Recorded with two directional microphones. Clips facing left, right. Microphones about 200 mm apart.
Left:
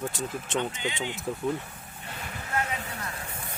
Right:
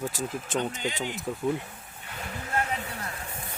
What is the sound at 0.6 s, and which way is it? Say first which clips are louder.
Speech: right 1 dB; 40° right (ahead or behind).